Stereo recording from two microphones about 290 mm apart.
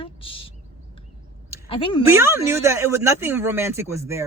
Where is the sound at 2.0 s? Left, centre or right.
Centre.